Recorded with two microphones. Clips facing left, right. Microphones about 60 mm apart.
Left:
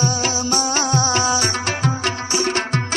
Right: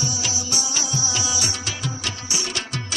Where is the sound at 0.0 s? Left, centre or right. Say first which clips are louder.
Left 8 dB; left.